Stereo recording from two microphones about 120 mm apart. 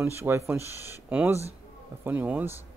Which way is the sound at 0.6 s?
25° left (ahead or behind).